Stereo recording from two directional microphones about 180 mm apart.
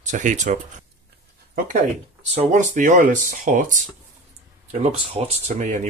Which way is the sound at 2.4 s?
40° right (ahead or behind).